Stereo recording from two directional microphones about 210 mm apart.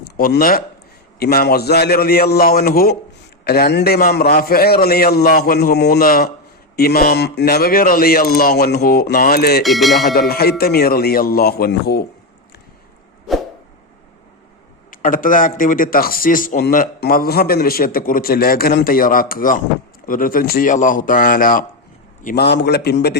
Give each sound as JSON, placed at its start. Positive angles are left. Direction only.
{"t": 0.2, "sound": "a man's voice", "side_deg": 45}
{"t": 9.6, "sound": "speech", "side_deg": 0}
{"t": 10.0, "sound": "a man's voice", "side_deg": 45}
{"t": 14.8, "sound": "a man's voice", "side_deg": 40}